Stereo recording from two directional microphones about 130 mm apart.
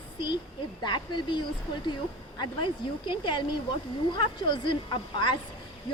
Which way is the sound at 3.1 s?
40° left (ahead or behind).